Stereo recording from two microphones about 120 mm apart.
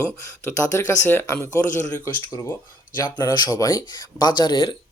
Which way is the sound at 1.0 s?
20° left (ahead or behind).